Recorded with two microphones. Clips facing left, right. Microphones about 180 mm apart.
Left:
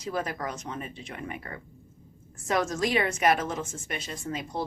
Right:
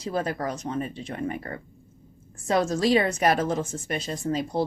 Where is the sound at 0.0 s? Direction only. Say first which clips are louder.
Right 4 dB; 30° right (ahead or behind).